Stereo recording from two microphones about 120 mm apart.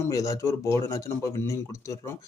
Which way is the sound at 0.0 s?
25° left (ahead or behind).